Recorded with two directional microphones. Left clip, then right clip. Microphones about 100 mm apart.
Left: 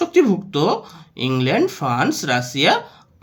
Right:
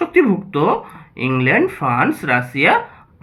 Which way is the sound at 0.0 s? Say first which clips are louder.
Right 1 dB; 35° left (ahead or behind).